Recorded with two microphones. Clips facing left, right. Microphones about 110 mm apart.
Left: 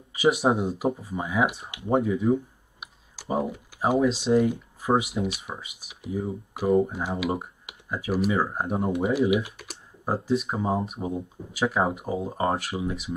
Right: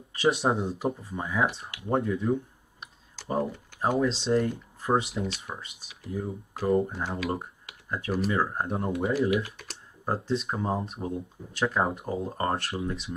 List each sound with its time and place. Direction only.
0.1 s speech: 5° left (ahead or behind)
2.8 s computer keyboard: 10° left (ahead or behind)
4.2 s speech: centre (ahead or behind)
8.9 s speech: 20° left (ahead or behind)
9.6 s speech: 5° left (ahead or behind)